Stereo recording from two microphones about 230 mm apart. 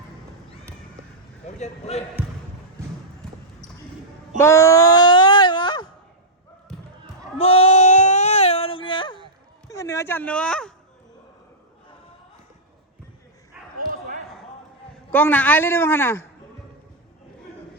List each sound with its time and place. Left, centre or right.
1.5 s speech: left
4.4 s wail: centre
7.3 s a sound: left
9.6 s speech: centre
13.7 s dog: right
15.1 s a man's voice: centre